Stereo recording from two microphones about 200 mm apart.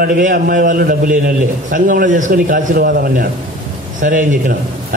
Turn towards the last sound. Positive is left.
turn(degrees=-40)  # may be behind; listen again after turning